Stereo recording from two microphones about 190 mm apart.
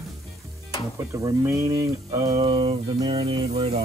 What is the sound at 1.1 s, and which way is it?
Speech, 15° right (ahead or behind).